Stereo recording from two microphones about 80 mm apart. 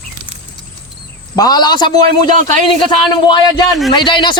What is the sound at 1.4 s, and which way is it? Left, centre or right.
A man's voice, left.